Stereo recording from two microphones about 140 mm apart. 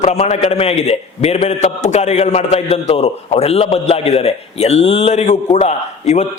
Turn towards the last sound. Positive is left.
turn(degrees=55)  # may be behind; listen again after turning